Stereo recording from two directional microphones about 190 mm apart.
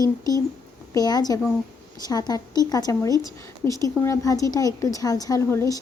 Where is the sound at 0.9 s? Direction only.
20° left (ahead or behind).